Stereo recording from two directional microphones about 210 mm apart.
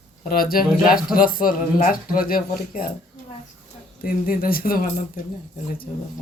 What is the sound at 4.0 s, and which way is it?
Speech, 45° left (ahead or behind).